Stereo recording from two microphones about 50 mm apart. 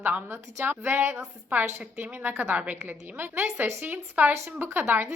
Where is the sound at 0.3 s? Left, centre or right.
Right.